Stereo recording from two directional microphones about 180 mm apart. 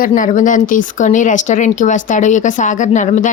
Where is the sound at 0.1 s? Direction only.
45° left (ahead or behind).